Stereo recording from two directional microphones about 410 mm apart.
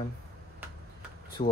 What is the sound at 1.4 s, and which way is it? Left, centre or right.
Speech, centre.